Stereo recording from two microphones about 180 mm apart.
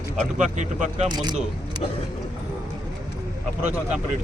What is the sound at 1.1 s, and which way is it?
Speech, 20° right (ahead or behind).